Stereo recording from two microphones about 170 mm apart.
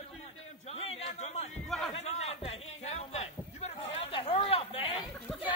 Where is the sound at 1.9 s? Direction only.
40° left (ahead or behind).